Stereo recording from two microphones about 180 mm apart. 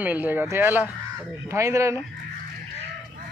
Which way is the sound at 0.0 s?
10° right (ahead or behind).